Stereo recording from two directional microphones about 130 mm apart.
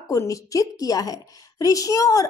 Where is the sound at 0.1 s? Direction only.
25° left (ahead or behind).